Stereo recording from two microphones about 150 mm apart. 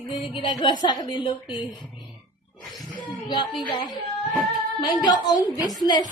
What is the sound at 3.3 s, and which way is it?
A woman's voice, 30° left (ahead or behind).